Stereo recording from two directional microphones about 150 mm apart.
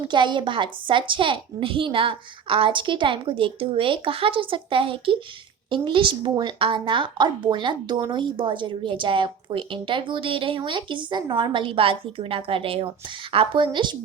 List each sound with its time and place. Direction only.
0.1 s speech: 30° right (ahead or behind)